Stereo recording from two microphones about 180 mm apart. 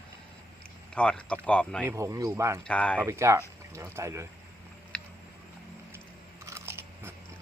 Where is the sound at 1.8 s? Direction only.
15° right (ahead or behind).